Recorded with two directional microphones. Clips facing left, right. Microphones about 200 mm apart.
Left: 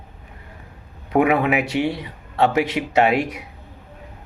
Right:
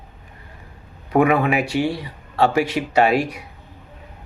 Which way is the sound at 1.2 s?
20° left (ahead or behind).